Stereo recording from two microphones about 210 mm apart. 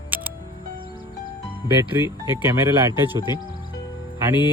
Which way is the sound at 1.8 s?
10° right (ahead or behind).